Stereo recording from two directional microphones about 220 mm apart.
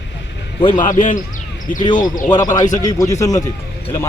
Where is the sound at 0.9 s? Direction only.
35° left (ahead or behind).